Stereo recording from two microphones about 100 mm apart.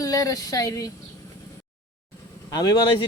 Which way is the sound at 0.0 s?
35° left (ahead or behind).